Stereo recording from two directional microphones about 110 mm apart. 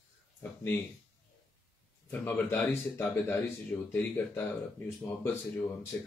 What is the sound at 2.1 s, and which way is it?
Speech, 20° left (ahead or behind).